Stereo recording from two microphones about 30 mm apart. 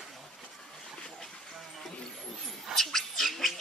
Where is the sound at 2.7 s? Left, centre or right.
Centre.